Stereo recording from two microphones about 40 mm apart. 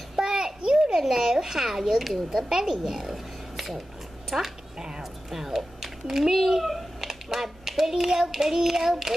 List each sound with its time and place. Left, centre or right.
0.1 s a sound: centre
0.6 s children playing: right
0.9 s a child's voice: centre